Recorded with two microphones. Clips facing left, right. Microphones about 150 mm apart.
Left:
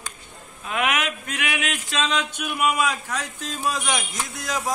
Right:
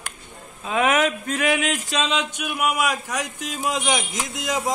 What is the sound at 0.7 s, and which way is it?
Speech, 35° right (ahead or behind).